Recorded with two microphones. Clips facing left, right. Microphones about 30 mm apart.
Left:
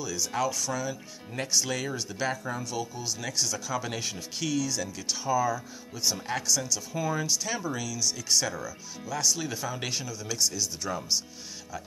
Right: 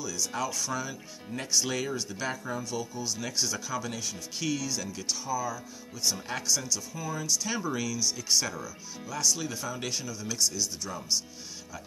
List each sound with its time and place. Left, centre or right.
0.0 s speech: centre
0.6 s speech: centre
1.9 s speech: centre
3.3 s speech: centre
3.9 s speech: left
4.4 s speech: centre
5.2 s speech: left
6.0 s speech: centre
6.9 s speech: left
7.4 s speech: centre
9.0 s speech: centre